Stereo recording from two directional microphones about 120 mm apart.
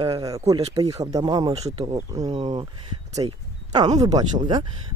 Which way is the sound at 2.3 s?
65° right (ahead or behind).